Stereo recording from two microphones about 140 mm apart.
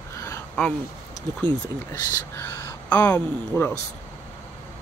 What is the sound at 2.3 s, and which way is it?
Speech, 20° left (ahead or behind).